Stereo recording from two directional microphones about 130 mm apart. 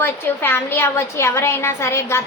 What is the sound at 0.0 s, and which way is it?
A woman's voice, 15° left (ahead or behind).